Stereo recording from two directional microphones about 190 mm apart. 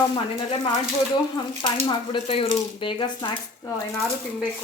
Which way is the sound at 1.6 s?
25° left (ahead or behind).